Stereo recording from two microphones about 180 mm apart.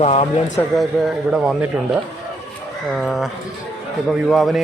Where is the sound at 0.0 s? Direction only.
35° left (ahead or behind).